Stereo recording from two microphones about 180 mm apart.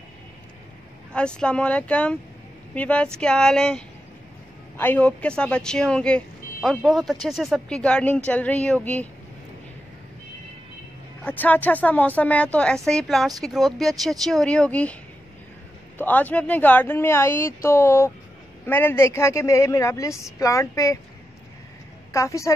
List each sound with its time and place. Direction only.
1.1 s speech: 5° left (ahead or behind)
11.2 s speech: 10° left (ahead or behind)
16.0 s speech: 10° left (ahead or behind)
22.1 s speech: 15° left (ahead or behind)